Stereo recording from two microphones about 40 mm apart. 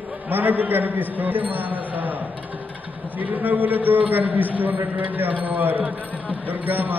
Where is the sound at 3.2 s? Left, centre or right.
Right.